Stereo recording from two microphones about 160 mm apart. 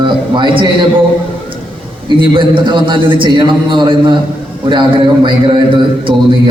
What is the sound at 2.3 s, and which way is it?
A man's voice, 30° right (ahead or behind).